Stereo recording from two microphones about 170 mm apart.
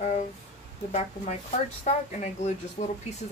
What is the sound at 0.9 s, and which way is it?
Speech, 45° left (ahead or behind).